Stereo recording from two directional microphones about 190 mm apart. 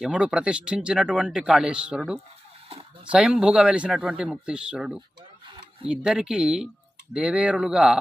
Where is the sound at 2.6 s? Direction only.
30° right (ahead or behind).